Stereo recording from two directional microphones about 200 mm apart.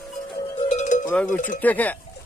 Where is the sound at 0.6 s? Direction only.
35° left (ahead or behind).